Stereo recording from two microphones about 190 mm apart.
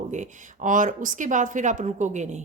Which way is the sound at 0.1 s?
40° right (ahead or behind).